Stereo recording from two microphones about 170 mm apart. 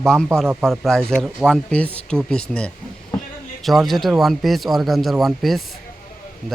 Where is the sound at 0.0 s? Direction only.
5° left (ahead or behind).